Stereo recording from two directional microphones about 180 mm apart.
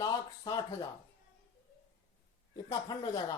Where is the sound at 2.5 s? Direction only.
25° left (ahead or behind).